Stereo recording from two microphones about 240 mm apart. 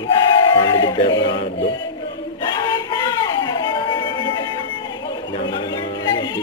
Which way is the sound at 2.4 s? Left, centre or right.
Centre.